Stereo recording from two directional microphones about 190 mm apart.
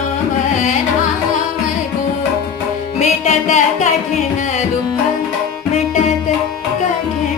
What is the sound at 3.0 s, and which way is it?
Music, 35° left (ahead or behind).